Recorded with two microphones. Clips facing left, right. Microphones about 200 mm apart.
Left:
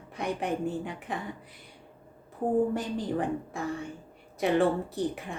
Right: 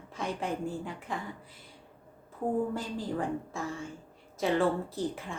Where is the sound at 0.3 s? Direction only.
20° left (ahead or behind).